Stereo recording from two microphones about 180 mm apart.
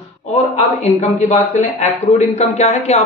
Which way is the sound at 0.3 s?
35° left (ahead or behind).